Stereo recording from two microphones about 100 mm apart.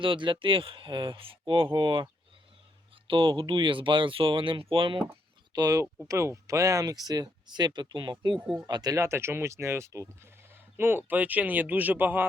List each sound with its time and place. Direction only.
0.0 s speech: 55° right (ahead or behind)
5.5 s speech: 40° right (ahead or behind); by 12.2 s 20° right (ahead or behind)